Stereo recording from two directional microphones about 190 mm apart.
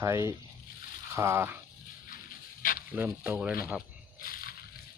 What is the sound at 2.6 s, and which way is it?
Sizzle, 45° left (ahead or behind).